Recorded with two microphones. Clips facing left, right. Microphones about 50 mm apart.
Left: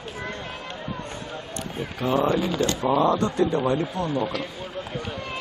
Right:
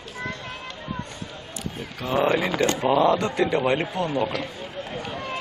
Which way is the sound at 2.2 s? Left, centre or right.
Right.